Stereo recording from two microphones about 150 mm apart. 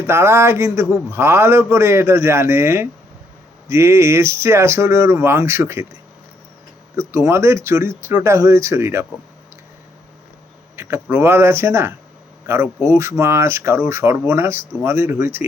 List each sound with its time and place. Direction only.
0.0 s a man's voice: 15° right (ahead or behind)
6.9 s a man's voice: 20° right (ahead or behind)
10.8 s a man's voice: 15° right (ahead or behind)